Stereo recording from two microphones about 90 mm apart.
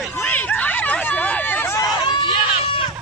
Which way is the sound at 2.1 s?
70° left (ahead or behind).